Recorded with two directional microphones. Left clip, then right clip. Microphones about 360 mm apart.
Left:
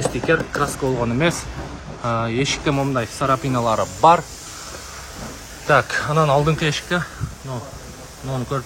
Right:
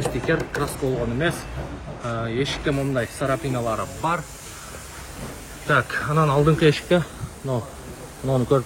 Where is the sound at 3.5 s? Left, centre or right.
Left.